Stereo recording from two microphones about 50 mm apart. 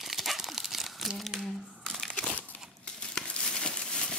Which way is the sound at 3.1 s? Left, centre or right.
Centre.